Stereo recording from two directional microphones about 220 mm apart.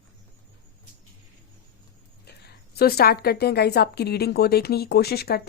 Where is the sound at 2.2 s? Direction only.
45° left (ahead or behind).